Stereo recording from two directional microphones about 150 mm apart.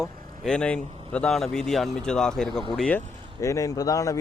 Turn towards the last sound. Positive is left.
turn(degrees=20)  # may be behind; listen again after turning